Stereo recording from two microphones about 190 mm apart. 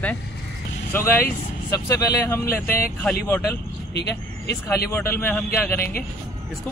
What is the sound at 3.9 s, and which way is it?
Speech, 60° left (ahead or behind).